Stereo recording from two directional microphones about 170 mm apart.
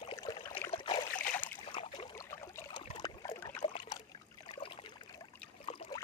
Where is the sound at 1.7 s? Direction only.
30° left (ahead or behind).